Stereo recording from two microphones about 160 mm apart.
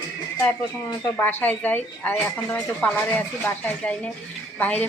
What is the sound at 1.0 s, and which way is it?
A woman's voice, 10° left (ahead or behind).